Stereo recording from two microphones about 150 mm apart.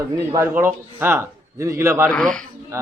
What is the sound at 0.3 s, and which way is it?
A man's voice, 15° right (ahead or behind).